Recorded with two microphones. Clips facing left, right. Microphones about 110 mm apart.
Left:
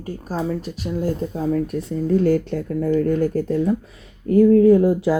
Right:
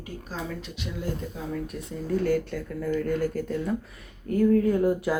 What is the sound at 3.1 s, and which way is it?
Speech, 25° left (ahead or behind).